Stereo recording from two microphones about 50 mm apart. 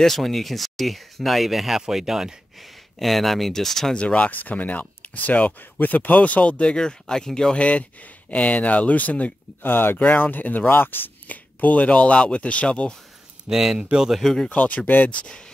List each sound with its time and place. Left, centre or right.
0.0 s speech: centre
3.0 s speech: centre
3.9 s speech: left
7.5 s speech: left
9.6 s speech: left
11.2 s speech: left
13.5 s speech: centre
14.2 s speech: centre
14.5 s speech: left
15.0 s speech: centre